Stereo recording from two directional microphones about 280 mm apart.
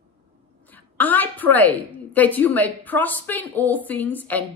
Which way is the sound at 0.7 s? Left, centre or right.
Centre.